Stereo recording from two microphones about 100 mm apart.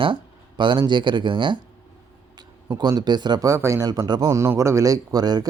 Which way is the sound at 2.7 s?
40° right (ahead or behind).